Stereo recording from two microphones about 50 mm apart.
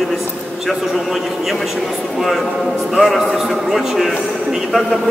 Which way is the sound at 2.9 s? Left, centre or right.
Centre.